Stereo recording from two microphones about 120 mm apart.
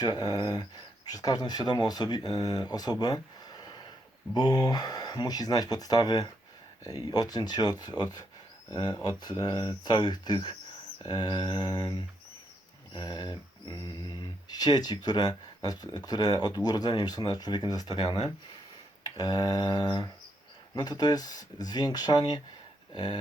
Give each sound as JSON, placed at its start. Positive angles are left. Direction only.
{"t": 0.0, "sound": "speech", "side_deg": 35}